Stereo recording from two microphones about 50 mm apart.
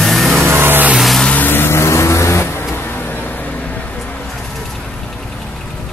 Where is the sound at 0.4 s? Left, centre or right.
Right.